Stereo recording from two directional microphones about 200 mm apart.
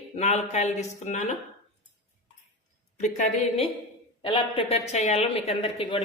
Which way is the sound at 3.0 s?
35° left (ahead or behind).